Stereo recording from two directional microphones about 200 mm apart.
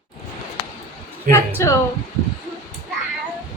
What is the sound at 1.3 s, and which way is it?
Speech, 15° left (ahead or behind).